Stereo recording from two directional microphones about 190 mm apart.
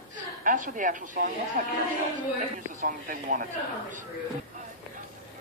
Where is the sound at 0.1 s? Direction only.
45° right (ahead or behind).